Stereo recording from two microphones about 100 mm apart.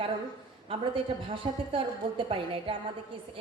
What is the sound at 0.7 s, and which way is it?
A woman's voice, 60° right (ahead or behind).